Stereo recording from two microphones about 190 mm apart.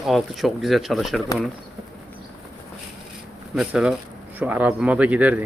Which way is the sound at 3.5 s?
5° right (ahead or behind).